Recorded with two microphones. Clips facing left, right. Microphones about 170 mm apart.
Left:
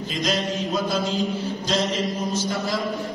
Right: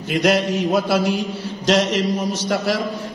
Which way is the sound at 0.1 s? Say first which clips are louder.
Right 8 dB; 70° right (ahead or behind).